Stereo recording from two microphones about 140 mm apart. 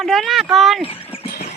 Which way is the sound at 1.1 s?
40° left (ahead or behind).